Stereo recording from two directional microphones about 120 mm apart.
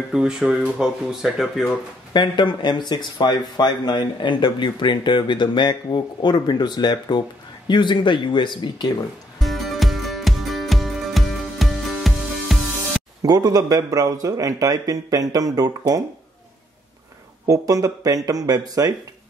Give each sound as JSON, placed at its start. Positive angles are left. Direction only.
{"t": 0.1, "sound": "speech", "side_deg": -5}
{"t": 2.1, "sound": "speech", "side_deg": 40}
{"t": 9.4, "sound": "music", "side_deg": 0}
{"t": 13.2, "sound": "a man's voice", "side_deg": -30}
{"t": 17.5, "sound": "a man's voice", "side_deg": -30}